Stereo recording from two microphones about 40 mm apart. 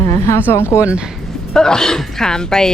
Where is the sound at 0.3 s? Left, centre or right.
Left.